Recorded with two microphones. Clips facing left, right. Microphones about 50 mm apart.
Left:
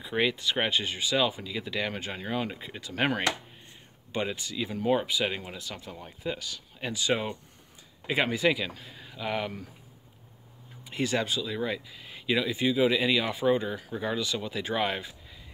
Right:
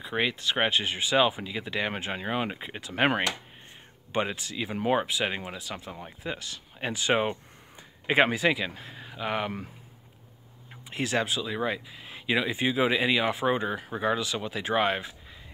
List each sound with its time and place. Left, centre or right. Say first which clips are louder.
0.0 s speech: left 1 dB; centre
0.9 s speech: right 3 dB; right
5.0 s speech: even; centre
5.9 s speech: left 4 dB; right
8.4 s speech: even; centre
8.6 s speech: right 3 dB; right
10.9 s speech: right 1 dB; centre